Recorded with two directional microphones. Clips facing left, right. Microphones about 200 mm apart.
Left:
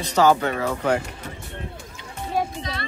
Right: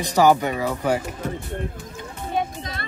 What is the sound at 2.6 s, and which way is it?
Speech, 50° right (ahead or behind).